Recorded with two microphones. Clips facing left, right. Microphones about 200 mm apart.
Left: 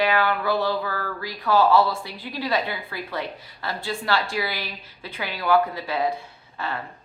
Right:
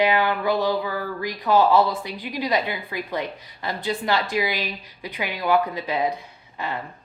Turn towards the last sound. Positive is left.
turn(degrees=-15)  # may be behind; listen again after turning